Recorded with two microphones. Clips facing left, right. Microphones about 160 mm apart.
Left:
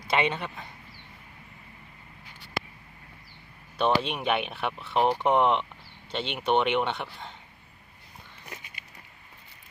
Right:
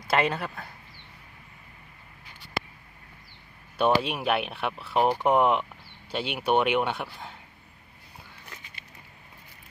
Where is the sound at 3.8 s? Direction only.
5° right (ahead or behind).